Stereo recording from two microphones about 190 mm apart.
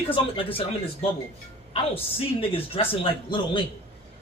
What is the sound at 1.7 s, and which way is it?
Speech, 30° left (ahead or behind).